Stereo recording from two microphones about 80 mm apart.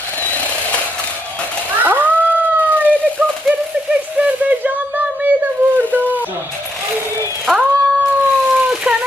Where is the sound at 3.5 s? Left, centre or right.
Centre.